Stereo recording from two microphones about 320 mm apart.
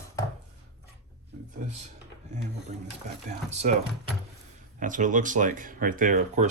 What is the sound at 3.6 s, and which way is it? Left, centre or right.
Speech, right.